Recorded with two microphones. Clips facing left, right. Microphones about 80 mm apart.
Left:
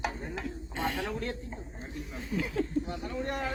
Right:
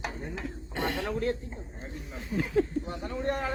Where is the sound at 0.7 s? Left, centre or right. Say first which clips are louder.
Right 2 dB; right.